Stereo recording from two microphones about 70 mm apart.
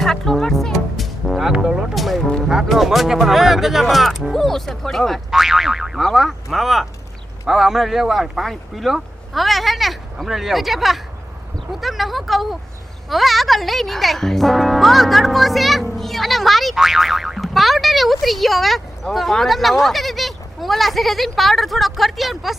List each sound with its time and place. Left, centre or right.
0.0 s speech: centre